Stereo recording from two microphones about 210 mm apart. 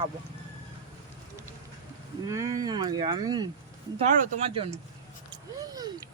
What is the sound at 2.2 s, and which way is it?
Speech, 15° right (ahead or behind).